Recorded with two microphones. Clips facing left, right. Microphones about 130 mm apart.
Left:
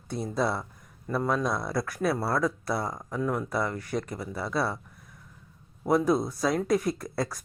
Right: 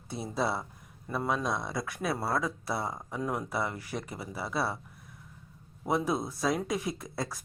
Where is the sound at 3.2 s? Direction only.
15° right (ahead or behind).